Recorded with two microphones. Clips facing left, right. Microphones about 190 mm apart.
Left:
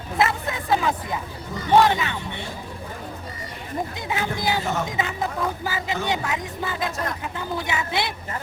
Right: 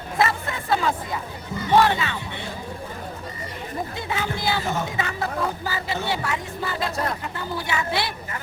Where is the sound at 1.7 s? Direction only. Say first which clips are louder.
Left 1 dB; 15° left (ahead or behind).